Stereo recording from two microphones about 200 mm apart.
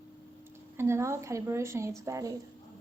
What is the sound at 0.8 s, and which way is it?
A woman's voice, 10° right (ahead or behind).